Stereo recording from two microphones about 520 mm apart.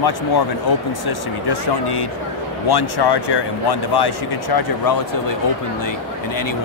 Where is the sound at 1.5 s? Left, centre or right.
Left.